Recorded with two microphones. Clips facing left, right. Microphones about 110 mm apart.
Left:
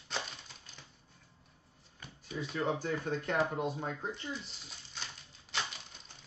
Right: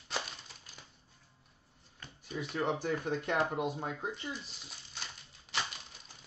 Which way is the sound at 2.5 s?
15° right (ahead or behind).